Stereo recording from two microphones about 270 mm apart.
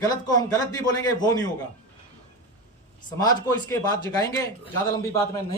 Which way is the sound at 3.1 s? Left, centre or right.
Centre.